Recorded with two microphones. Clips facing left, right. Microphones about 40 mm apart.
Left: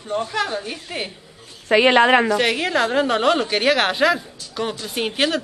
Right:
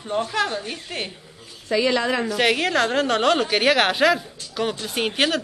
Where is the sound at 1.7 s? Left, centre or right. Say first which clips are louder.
Left 7 dB; left.